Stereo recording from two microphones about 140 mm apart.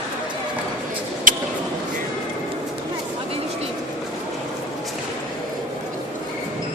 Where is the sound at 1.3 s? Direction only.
70° right (ahead or behind).